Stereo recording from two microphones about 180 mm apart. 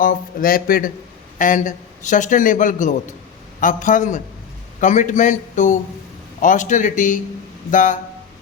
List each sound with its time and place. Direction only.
0.0 s speech: 50° left (ahead or behind)